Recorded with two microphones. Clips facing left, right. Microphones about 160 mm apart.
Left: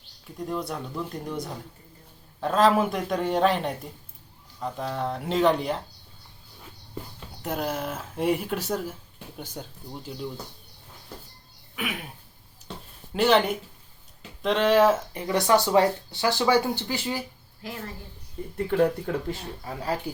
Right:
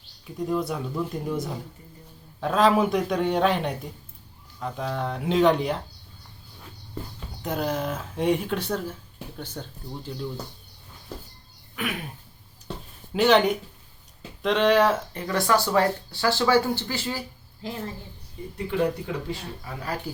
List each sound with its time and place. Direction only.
0.3 s speech: centre (ahead or behind)
7.4 s speech: centre (ahead or behind)
11.8 s speech: 5° left (ahead or behind)
13.1 s speech: centre (ahead or behind)
15.3 s speech: 20° left (ahead or behind)
17.6 s a woman's voice: 25° right (ahead or behind)
18.5 s speech: 50° left (ahead or behind)
19.6 s speech: 30° left (ahead or behind)